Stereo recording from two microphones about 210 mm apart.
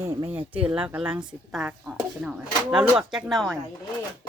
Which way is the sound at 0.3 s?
5° right (ahead or behind).